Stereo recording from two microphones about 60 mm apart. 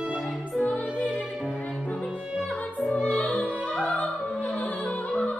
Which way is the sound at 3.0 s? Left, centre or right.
Left.